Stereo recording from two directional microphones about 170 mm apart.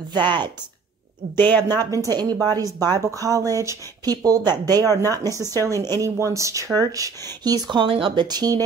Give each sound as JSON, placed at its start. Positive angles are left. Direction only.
{"t": 1.3, "sound": "speech", "side_deg": 10}
{"t": 2.0, "sound": "a woman's voice", "side_deg": -20}
{"t": 4.8, "sound": "speech", "side_deg": 15}
{"t": 5.9, "sound": "a woman's voice", "side_deg": -20}